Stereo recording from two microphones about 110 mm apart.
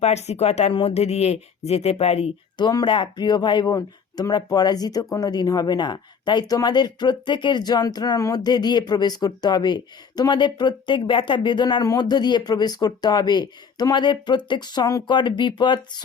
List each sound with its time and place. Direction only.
0.0 s speech: 85° left
0.7 s speech: 60° left (ahead or behind)
2.6 s speech: 40° left (ahead or behind)